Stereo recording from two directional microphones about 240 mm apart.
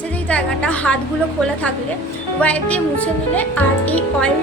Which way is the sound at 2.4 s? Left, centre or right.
Centre.